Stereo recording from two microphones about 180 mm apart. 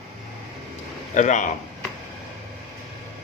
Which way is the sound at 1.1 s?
40° left (ahead or behind).